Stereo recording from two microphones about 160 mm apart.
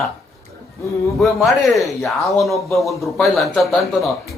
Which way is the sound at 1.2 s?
Centre (ahead or behind).